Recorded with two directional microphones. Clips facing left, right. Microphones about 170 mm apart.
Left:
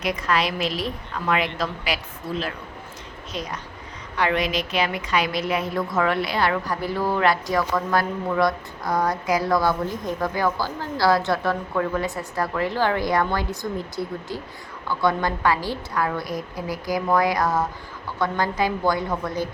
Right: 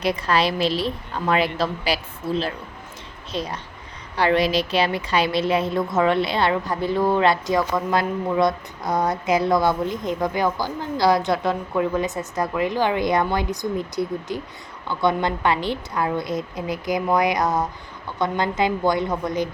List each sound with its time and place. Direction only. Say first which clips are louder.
0.0 s a woman's voice: right 3 dB; 30° right (ahead or behind)
3.3 s a woman's voice: right 4 dB; 30° right (ahead or behind)